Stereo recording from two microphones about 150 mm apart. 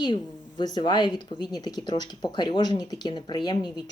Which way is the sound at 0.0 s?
30° left (ahead or behind).